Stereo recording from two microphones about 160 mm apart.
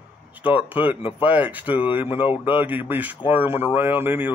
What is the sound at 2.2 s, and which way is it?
Speech, 30° left (ahead or behind).